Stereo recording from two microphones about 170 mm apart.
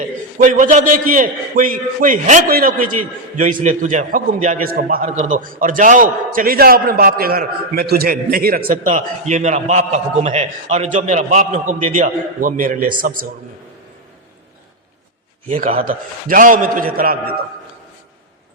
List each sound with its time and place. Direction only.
0.0 s a man's voice: 50° right (ahead or behind)
4.7 s a man's voice: 60° right (ahead or behind)
5.0 s a man's voice: 40° right (ahead or behind)
15.4 s a man's voice: 50° right (ahead or behind)